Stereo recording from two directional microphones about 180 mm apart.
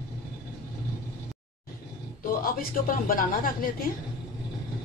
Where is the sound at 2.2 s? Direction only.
50° left (ahead or behind).